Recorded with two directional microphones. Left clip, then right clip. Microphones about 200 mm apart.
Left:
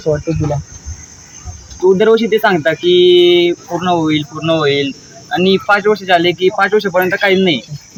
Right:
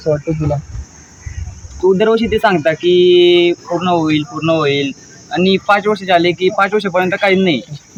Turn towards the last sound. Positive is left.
turn(degrees=-5)  # may be behind; listen again after turning